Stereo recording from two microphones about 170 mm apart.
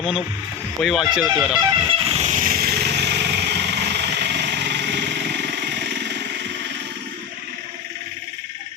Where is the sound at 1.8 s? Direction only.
35° right (ahead or behind); by 6.2 s 90° right.